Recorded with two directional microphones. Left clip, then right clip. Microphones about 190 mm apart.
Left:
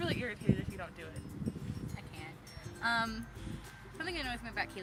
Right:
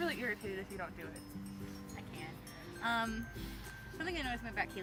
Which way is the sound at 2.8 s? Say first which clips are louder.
Left 3 dB; centre (ahead or behind).